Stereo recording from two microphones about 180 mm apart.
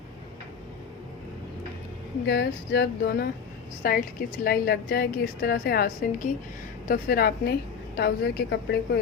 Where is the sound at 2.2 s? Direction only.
70° left (ahead or behind).